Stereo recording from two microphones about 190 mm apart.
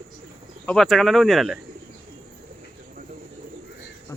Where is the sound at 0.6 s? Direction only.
Centre (ahead or behind).